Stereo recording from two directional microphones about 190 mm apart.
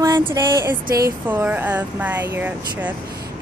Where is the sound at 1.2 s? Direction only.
10° right (ahead or behind).